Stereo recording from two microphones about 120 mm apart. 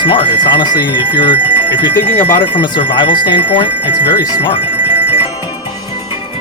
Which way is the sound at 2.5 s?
45° left (ahead or behind).